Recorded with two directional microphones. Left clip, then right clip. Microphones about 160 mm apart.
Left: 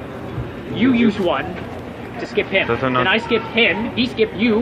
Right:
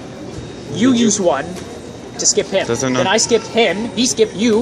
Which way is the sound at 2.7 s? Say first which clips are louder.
Even; 90° right.